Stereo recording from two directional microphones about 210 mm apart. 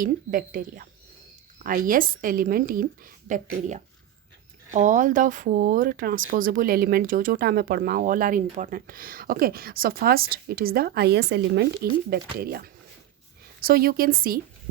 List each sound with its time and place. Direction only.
0.0 s a woman's voice: 40° right (ahead or behind)